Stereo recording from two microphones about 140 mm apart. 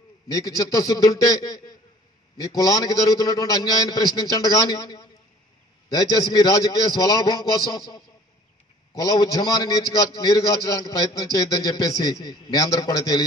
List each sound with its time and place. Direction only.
0.6 s a man's voice: 25° left (ahead or behind)